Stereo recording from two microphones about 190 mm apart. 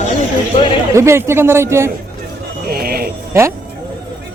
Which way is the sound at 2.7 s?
50° right (ahead or behind).